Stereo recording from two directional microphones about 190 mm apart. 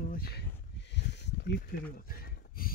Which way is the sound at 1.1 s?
60° left (ahead or behind).